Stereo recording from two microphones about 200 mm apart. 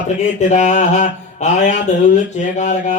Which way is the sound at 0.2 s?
35° left (ahead or behind).